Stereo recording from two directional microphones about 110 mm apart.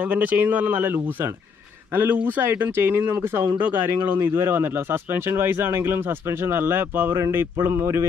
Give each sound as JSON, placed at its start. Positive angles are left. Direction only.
{"t": 0.0, "sound": "speech", "side_deg": -15}